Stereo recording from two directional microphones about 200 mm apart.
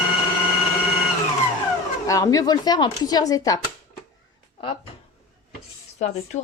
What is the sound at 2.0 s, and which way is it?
Speech, 15° left (ahead or behind).